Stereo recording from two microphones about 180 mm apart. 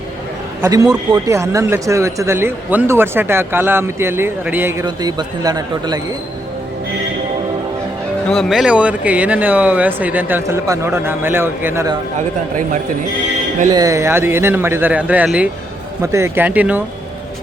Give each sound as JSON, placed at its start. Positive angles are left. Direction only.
{"t": 0.6, "sound": "a man's voice", "side_deg": -20}
{"t": 8.3, "sound": "speech", "side_deg": 0}
{"t": 13.7, "sound": "speech", "side_deg": -20}